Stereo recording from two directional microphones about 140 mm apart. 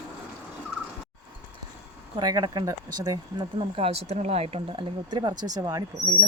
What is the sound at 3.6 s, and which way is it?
Speech, 45° right (ahead or behind).